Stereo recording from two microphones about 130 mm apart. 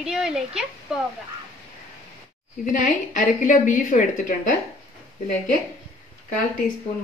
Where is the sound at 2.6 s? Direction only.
90° left.